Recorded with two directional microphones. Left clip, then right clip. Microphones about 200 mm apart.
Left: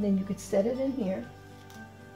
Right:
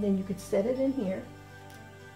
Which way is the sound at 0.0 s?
25° right (ahead or behind).